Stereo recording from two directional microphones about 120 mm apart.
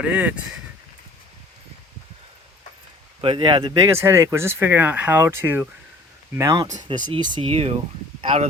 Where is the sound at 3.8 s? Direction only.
20° right (ahead or behind).